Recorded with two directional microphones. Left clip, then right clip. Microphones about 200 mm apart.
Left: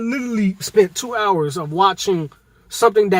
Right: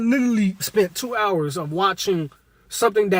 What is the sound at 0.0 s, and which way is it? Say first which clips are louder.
Speech: right 3 dB; 50° right (ahead or behind).